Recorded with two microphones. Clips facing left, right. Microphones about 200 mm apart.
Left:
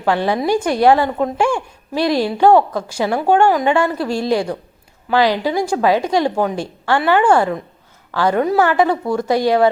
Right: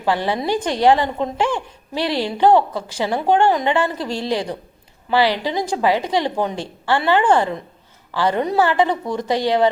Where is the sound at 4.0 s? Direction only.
10° left (ahead or behind).